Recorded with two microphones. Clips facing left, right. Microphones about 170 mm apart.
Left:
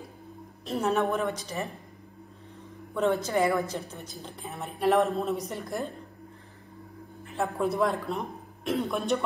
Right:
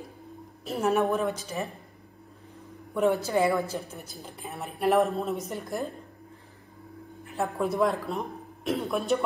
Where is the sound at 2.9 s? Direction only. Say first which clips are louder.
Right 2 dB; 15° right (ahead or behind).